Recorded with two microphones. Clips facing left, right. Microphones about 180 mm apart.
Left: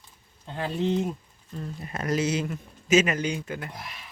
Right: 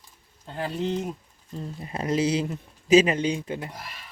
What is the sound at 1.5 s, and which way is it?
Speech, 25° right (ahead or behind).